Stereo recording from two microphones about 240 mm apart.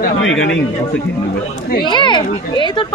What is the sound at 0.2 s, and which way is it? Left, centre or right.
Speech, left.